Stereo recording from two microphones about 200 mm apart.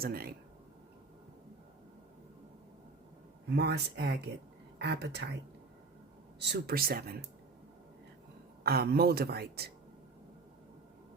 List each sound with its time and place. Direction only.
0.0 s speech: 50° right (ahead or behind)
3.5 s speech: 55° right (ahead or behind)
6.4 s speech: 55° right (ahead or behind)
8.6 s speech: 50° right (ahead or behind)